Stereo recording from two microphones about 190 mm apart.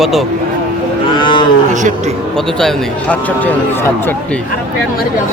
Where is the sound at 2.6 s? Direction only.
5° left (ahead or behind).